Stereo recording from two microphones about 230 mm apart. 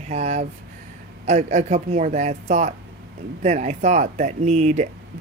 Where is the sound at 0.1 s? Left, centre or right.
Right.